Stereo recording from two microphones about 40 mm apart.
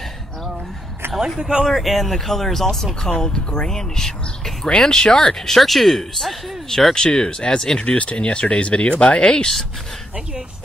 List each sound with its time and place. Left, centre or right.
1.0 s a sound: right
1.4 s speech: centre
1.7 s speech: centre
6.9 s speech: centre
7.8 s speech: left
9.2 s speech: left